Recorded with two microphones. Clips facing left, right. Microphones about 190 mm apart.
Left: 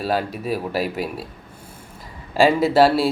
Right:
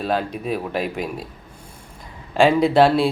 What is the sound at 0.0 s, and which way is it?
Speech, 5° left (ahead or behind).